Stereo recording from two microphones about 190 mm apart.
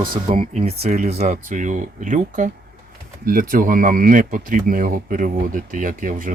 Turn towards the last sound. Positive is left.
turn(degrees=-45)  # may be behind; listen again after turning